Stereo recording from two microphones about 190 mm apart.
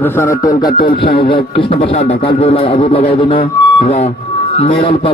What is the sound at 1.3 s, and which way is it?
A man's voice, 25° left (ahead or behind).